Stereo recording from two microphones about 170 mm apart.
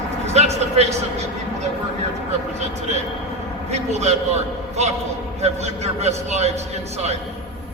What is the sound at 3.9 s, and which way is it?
Speech, 40° right (ahead or behind).